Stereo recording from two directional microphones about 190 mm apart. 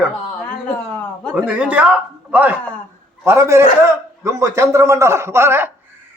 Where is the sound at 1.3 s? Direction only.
5° right (ahead or behind).